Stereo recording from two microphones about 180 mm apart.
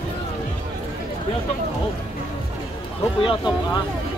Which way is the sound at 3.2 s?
30° left (ahead or behind).